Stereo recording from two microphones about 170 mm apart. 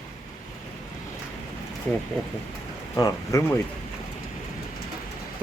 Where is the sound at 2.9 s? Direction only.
20° left (ahead or behind).